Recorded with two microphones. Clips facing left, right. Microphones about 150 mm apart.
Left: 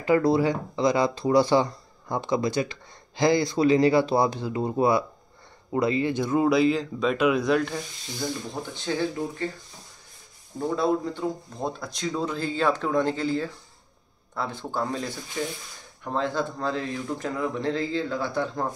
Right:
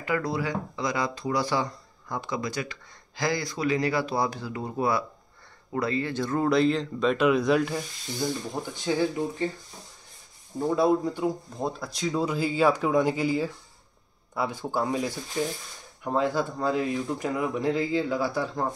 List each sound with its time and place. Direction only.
0.0 s speech: 30° left (ahead or behind); by 7.8 s 5° right (ahead or behind)
8.9 s speech: 10° right (ahead or behind)
10.8 s speech: 10° right (ahead or behind)